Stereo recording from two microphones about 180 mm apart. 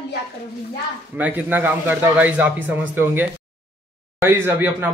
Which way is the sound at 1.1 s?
10° right (ahead or behind).